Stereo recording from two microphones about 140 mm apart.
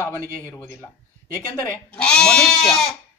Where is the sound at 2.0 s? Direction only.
5° left (ahead or behind).